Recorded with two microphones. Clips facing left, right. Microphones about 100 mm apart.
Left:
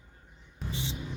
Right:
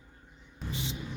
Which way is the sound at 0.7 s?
20° left (ahead or behind).